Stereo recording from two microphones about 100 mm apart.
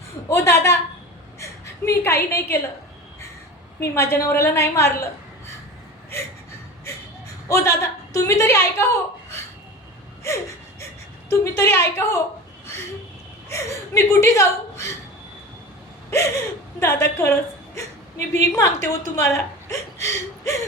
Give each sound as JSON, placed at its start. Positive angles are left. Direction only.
{"t": 0.3, "sound": "a woman's voice", "side_deg": 25}
{"t": 3.9, "sound": "a woman's voice", "side_deg": 25}
{"t": 7.4, "sound": "a woman's voice", "side_deg": 30}
{"t": 10.2, "sound": "gasp", "side_deg": 30}
{"t": 11.3, "sound": "a woman's voice", "side_deg": 25}
{"t": 13.5, "sound": "a woman's voice", "side_deg": 30}
{"t": 16.0, "sound": "a sound", "side_deg": 30}
{"t": 16.8, "sound": "a woman's voice", "side_deg": 25}
{"t": 18.3, "sound": "a woman's voice", "side_deg": 30}